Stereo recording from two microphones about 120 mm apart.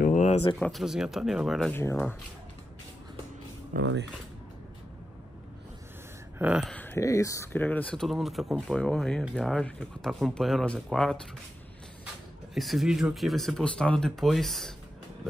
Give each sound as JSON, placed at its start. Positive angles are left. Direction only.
{"t": 0.1, "sound": "a sound", "side_deg": 90}
{"t": 0.6, "sound": "speech", "side_deg": 0}
{"t": 1.7, "sound": "speech", "side_deg": 20}
{"t": 6.3, "sound": "speech", "side_deg": -15}
{"t": 6.8, "sound": "speech", "side_deg": 20}
{"t": 7.6, "sound": "speech", "side_deg": 10}
{"t": 12.5, "sound": "speech", "side_deg": 0}